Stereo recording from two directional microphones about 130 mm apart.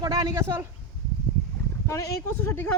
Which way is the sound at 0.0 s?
30° right (ahead or behind).